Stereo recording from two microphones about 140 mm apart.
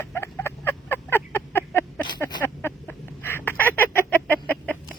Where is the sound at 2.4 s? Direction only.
15° left (ahead or behind).